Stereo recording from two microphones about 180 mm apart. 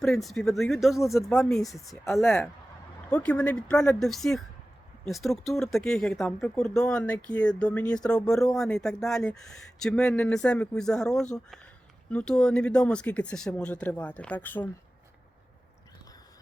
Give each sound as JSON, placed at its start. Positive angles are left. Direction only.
{"t": 0.0, "sound": "speech", "side_deg": 0}
{"t": 1.0, "sound": "speech", "side_deg": 15}
{"t": 1.5, "sound": "speech", "side_deg": 0}